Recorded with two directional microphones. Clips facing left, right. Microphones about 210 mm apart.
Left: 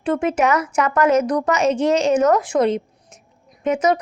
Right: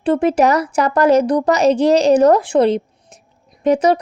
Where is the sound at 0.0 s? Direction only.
35° right (ahead or behind).